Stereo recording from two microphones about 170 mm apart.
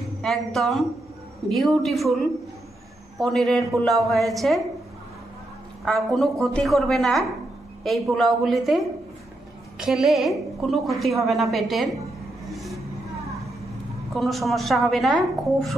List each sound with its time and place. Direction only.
0.2 s a woman's voice: centre (ahead or behind)
3.2 s a woman's voice: centre (ahead or behind)
5.9 s a woman's voice: centre (ahead or behind)
12.4 s vehicle: centre (ahead or behind)
14.1 s a woman's voice: centre (ahead or behind)